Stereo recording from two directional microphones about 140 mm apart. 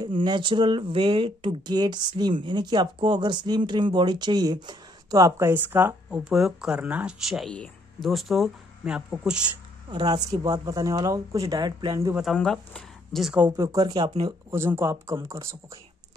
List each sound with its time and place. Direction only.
0.0 s speech: 35° right (ahead or behind); by 6.2 s 15° right (ahead or behind)
6.2 s speech: 5° right (ahead or behind)
9.8 s speech: 30° right (ahead or behind)
12.2 s speech: centre (ahead or behind)
13.5 s speech: 25° right (ahead or behind)
14.5 s speech: 15° right (ahead or behind)